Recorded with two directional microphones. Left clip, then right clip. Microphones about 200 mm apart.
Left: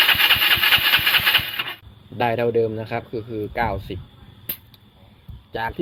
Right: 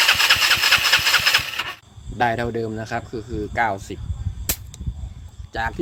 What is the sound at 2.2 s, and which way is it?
Speech, 15° right (ahead or behind).